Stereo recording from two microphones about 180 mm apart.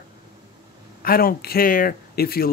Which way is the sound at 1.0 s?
55° left (ahead or behind).